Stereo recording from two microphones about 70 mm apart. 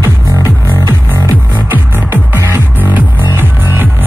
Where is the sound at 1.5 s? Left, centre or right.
Right.